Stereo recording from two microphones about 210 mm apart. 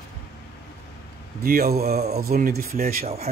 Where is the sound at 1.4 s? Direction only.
45° right (ahead or behind).